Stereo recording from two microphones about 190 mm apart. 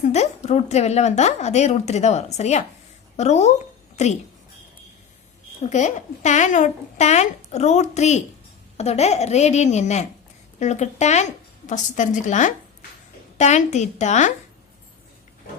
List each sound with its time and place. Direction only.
0.0 s a woman's voice: 35° left (ahead or behind)
5.6 s a woman's voice: 40° left (ahead or behind)